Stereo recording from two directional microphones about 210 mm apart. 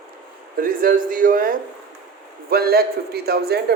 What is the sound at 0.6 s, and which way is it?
A man's voice, 40° right (ahead or behind).